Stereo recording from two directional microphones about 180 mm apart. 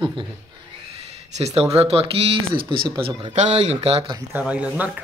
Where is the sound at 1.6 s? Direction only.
35° right (ahead or behind).